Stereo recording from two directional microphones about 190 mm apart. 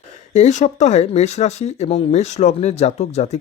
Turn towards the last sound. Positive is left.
turn(degrees=35)  # may be behind; listen again after turning